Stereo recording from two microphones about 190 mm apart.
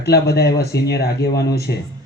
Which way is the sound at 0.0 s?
55° left (ahead or behind).